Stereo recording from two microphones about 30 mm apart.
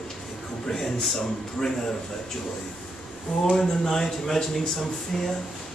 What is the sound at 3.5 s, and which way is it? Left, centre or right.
Speech, centre.